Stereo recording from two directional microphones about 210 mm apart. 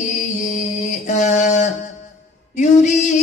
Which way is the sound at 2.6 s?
35° left (ahead or behind).